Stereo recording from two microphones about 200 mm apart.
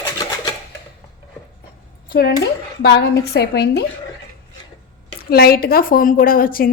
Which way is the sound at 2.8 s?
55° left (ahead or behind).